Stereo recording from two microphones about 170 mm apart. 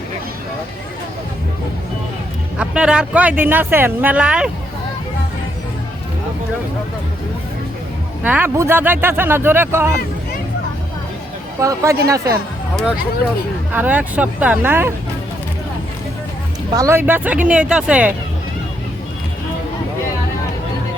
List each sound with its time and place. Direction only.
2.6 s speech: 5° right (ahead or behind)
8.2 s speech: 10° right (ahead or behind)
11.6 s speech: 20° right (ahead or behind)
13.7 s speech: 10° right (ahead or behind)
16.7 s speech: 15° right (ahead or behind)